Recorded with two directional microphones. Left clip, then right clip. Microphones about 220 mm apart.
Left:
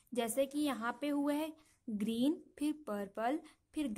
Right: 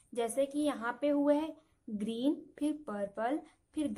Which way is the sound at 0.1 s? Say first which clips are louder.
Right 2 dB; 45° left (ahead or behind).